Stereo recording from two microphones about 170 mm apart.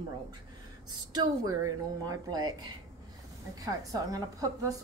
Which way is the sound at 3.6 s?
20° right (ahead or behind).